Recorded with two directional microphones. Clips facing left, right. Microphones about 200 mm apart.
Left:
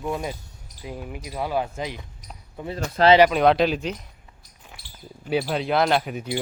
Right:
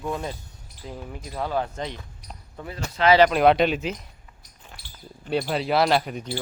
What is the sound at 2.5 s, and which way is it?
Speech, 20° left (ahead or behind).